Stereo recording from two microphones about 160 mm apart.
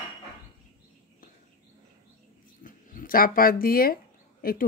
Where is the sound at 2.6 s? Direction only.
60° left (ahead or behind).